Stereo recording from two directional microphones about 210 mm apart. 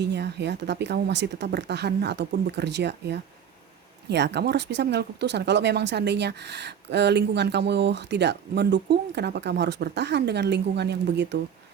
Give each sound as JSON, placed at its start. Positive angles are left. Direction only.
{"t": 0.0, "sound": "speech", "side_deg": -55}